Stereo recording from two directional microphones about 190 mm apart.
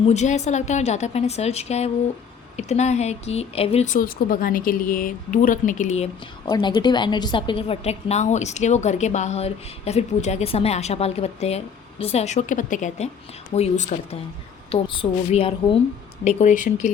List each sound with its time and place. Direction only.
0.0 s a woman's voice: 35° left (ahead or behind)
6.5 s a woman's voice: 25° left (ahead or behind)
14.7 s a woman's voice: 30° left (ahead or behind)
16.2 s a woman's voice: 40° left (ahead or behind)